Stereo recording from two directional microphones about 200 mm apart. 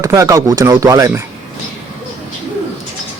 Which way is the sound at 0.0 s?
15° right (ahead or behind).